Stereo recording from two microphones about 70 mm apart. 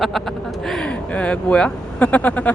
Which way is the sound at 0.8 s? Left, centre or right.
Centre.